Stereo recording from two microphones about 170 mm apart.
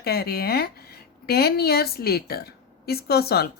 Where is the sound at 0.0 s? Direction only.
65° left (ahead or behind).